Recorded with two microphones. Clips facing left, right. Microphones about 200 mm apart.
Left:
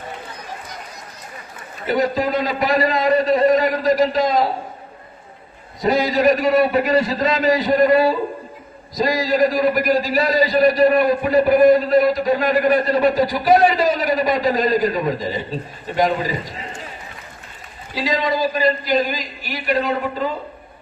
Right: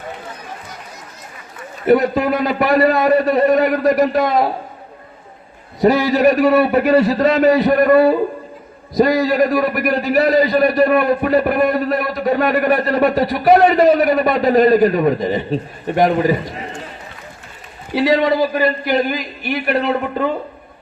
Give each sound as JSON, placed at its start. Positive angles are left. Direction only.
{"t": 1.8, "sound": "a man's voice", "side_deg": -60}
{"t": 5.8, "sound": "a man's voice", "side_deg": -65}
{"t": 17.9, "sound": "a man's voice", "side_deg": -60}